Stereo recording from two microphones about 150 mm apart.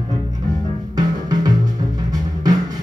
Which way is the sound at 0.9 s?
25° right (ahead or behind).